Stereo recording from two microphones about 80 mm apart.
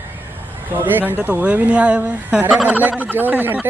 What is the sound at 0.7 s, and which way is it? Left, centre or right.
A man's voice, right.